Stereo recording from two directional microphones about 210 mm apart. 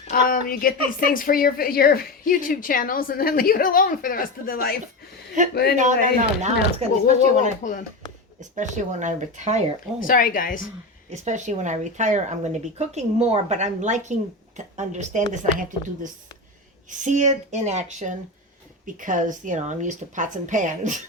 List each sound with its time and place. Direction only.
0.1 s a woman's voice: 40° left (ahead or behind)
5.4 s speech: 35° right (ahead or behind)
7.6 s a woman's voice: 40° left (ahead or behind)
8.4 s speech: 35° right (ahead or behind)
10.0 s a woman's voice: 40° left (ahead or behind)
11.1 s speech: 35° right (ahead or behind)
17.0 s speech: 35° right (ahead or behind)